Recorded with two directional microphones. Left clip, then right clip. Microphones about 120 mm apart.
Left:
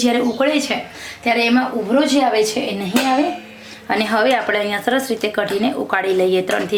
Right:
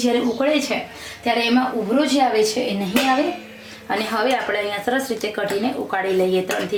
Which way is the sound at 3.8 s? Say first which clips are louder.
Left 4 dB; 35° left (ahead or behind).